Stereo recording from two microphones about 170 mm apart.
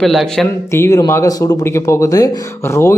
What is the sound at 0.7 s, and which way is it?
A man's voice, 15° left (ahead or behind).